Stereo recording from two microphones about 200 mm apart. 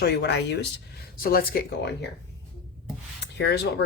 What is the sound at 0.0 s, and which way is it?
Speech, 60° left (ahead or behind).